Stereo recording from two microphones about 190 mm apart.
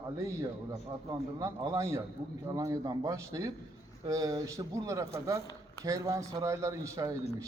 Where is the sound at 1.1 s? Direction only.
20° right (ahead or behind).